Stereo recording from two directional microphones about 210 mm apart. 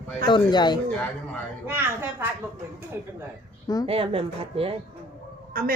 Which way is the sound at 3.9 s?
25° right (ahead or behind).